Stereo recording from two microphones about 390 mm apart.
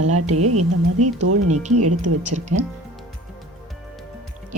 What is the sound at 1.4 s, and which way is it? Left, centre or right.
Speech, centre.